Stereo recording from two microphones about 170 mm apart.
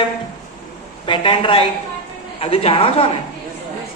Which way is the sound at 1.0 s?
30° left (ahead or behind).